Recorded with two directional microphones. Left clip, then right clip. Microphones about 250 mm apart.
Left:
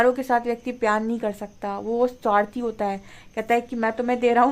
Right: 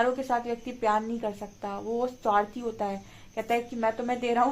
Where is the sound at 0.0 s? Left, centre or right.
Left.